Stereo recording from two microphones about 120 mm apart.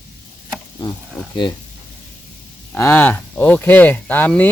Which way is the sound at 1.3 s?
40° left (ahead or behind).